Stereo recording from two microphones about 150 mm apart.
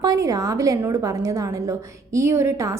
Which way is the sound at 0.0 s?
25° right (ahead or behind).